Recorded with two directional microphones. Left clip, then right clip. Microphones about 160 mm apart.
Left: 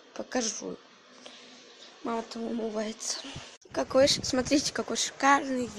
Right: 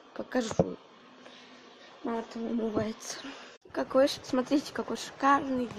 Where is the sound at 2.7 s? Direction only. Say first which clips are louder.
Even; 10° right (ahead or behind).